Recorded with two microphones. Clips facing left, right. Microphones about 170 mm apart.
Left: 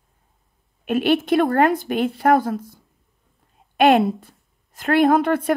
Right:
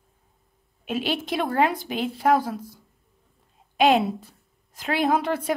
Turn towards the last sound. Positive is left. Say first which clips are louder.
# left 6 dB
turn(degrees=55)  # may be behind; listen again after turning